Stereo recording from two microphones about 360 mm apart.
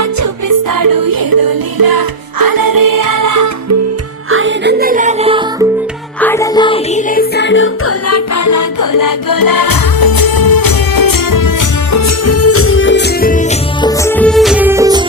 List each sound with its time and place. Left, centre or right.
0.0 s music: right
4.3 s music: right; by 5.6 s centre
6.1 s music: centre
7.2 s music: left
13.8 s music: centre